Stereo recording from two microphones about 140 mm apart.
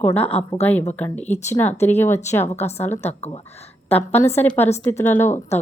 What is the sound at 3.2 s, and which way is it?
Speech, 50° left (ahead or behind).